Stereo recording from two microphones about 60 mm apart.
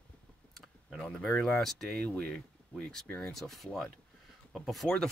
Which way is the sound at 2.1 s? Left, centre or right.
Centre.